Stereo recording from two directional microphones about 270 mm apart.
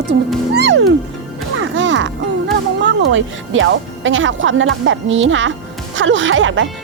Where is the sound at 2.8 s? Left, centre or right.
Right.